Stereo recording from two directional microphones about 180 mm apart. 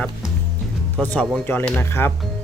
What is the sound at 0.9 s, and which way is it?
Speech, 10° left (ahead or behind).